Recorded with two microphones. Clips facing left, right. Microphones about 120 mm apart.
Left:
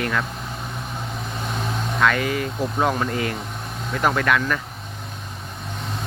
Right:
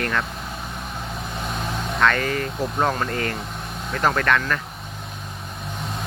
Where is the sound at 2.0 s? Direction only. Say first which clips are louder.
Even; 10° left (ahead or behind).